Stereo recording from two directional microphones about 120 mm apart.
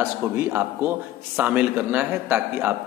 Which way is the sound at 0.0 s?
20° right (ahead or behind).